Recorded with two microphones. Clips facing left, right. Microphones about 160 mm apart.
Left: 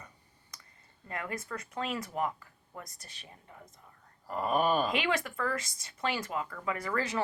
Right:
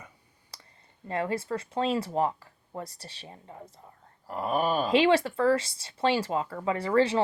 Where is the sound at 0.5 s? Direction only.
30° right (ahead or behind).